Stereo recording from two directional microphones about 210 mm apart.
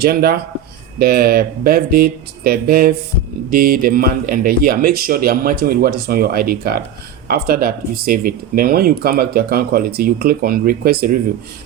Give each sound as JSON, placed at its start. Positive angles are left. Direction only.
{"t": 0.0, "sound": "speech", "side_deg": -50}